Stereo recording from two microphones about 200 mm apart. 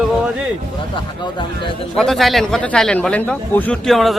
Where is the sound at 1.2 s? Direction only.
25° left (ahead or behind).